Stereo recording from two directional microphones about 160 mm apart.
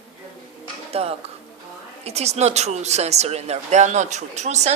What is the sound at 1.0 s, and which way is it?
Speech, 40° right (ahead or behind).